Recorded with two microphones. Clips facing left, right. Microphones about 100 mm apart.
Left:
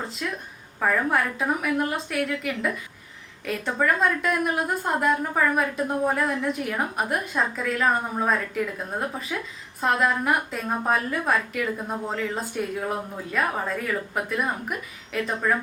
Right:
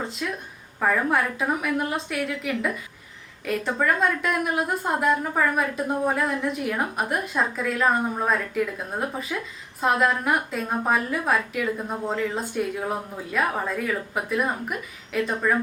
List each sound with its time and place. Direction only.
0.2 s a woman's voice: centre (ahead or behind)